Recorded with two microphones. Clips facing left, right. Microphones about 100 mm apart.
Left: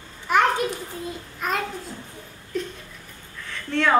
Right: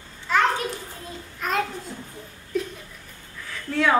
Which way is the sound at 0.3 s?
15° left (ahead or behind).